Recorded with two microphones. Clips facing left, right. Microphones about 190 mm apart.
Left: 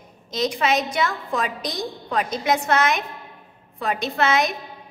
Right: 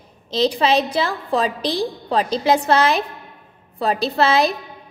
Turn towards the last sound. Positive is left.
turn(degrees=-35)  # may be behind; listen again after turning